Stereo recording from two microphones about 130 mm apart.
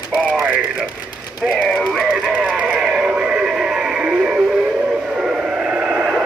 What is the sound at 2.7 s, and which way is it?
Music, 5° right (ahead or behind).